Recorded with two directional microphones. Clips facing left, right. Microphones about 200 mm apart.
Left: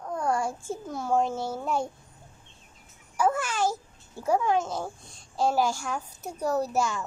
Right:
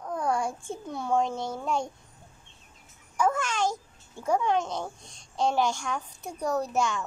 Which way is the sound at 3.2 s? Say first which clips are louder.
Left 1 dB; 5° left (ahead or behind).